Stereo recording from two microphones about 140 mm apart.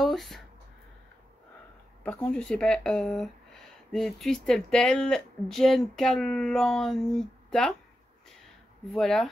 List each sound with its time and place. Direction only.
0.0 s a sound: centre (ahead or behind)
2.0 s speech: 10° left (ahead or behind)
8.9 s speech: centre (ahead or behind)